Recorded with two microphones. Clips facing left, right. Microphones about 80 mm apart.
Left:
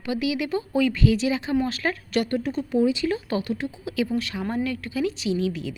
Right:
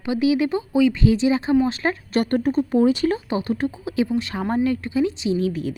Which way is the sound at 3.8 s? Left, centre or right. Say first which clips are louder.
Right 1 dB; right.